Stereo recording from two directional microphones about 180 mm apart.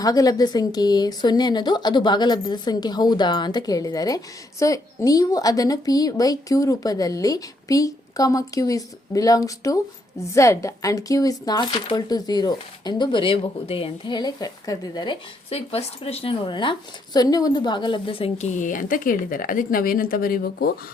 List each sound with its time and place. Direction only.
0.0 s a woman's voice: 20° left (ahead or behind); by 20.7 s 55° left (ahead or behind)